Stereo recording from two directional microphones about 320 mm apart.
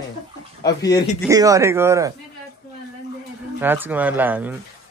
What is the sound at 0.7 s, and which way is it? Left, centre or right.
Speech, centre.